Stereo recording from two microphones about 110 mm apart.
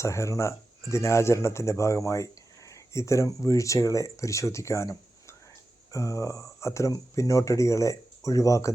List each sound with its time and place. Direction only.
0.0 s speech: 25° left (ahead or behind)